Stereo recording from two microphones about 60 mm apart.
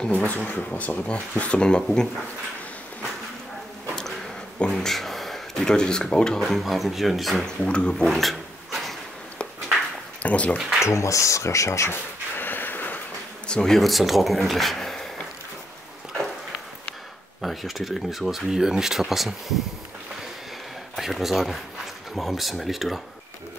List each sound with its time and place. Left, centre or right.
0.1 s speech: left; by 2.0 s centre
4.7 s speech: centre
6.4 s speech: centre
7.4 s speech: centre
8.1 s dog: centre
10.2 s speech: left
10.8 s speech: left
12.4 s gasp: left
13.5 s speech: centre
17.4 s speech: centre
20.9 s speech: centre